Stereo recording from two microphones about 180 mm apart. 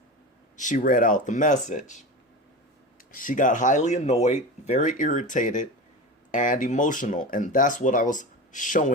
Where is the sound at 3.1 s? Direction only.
50° left (ahead or behind).